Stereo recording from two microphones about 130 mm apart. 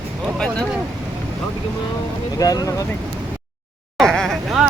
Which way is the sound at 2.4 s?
25° left (ahead or behind).